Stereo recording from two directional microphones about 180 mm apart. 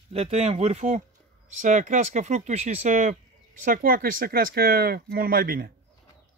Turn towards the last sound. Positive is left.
turn(degrees=-55)  # may be behind; listen again after turning